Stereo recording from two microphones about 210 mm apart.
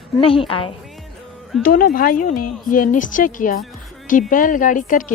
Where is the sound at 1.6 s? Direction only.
40° left (ahead or behind).